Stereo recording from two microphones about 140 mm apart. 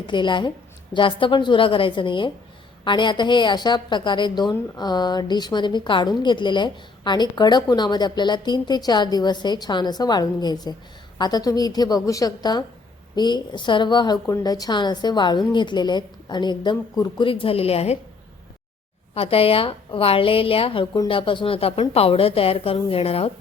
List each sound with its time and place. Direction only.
0.1 s a woman's voice: 35° left (ahead or behind)
19.1 s a woman's voice: 45° left (ahead or behind)